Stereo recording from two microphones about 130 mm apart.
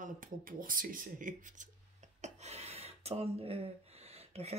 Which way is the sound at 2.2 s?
55° right (ahead or behind).